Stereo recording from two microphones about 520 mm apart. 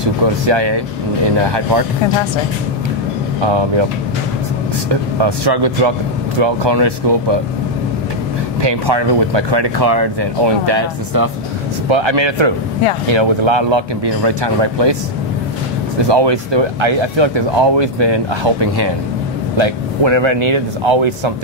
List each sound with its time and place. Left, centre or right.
0.0 s speech: right
3.3 s speech: right
4.8 s speech: right
8.6 s speech: right
16.0 s speech: right